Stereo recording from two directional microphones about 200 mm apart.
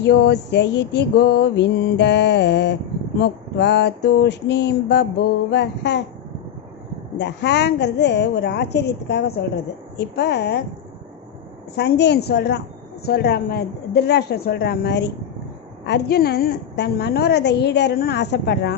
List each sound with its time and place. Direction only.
0.0 s a woman's voice: 55° left (ahead or behind)
7.2 s a woman's voice: 60° left (ahead or behind)
11.8 s a woman's voice: 55° left (ahead or behind)